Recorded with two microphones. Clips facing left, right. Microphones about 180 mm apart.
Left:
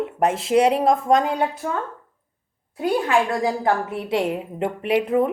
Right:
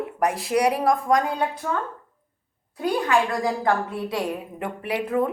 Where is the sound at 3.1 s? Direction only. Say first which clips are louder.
Left 2 dB; 20° left (ahead or behind).